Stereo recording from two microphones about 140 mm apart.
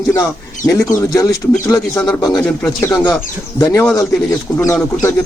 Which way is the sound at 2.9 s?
25° left (ahead or behind).